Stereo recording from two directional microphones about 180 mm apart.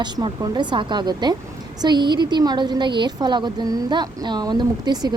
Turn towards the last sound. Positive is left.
turn(degrees=-20)  # may be behind; listen again after turning